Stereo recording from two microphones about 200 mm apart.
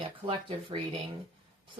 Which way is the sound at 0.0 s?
25° right (ahead or behind).